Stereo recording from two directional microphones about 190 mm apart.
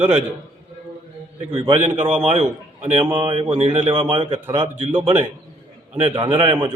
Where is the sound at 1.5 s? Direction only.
30° right (ahead or behind).